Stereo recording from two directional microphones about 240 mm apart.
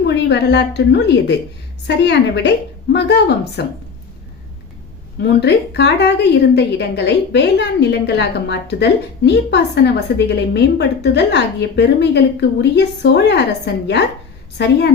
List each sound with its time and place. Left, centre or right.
0.0 s a woman's voice: left
5.2 s a woman's voice: left